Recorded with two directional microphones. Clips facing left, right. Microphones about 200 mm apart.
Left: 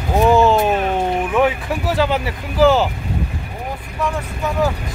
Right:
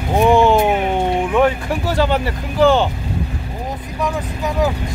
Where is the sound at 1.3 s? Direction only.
Centre (ahead or behind).